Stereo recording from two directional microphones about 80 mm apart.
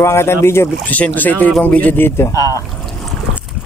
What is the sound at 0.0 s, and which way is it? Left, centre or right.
Speech, left.